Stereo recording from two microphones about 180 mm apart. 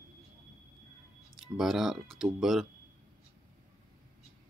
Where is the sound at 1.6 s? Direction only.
Centre (ahead or behind).